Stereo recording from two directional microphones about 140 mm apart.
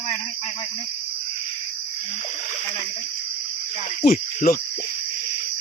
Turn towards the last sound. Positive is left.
turn(degrees=90)